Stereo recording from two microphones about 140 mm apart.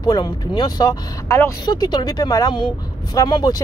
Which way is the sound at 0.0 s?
30° left (ahead or behind).